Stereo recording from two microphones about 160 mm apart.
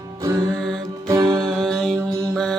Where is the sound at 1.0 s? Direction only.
25° right (ahead or behind).